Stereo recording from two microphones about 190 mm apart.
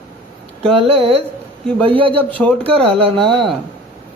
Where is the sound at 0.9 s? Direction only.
30° right (ahead or behind).